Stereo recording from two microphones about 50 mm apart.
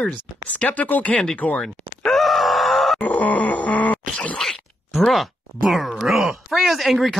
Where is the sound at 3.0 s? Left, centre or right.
Left.